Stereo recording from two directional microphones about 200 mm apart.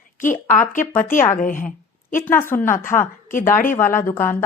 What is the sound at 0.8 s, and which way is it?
Speech, 10° left (ahead or behind).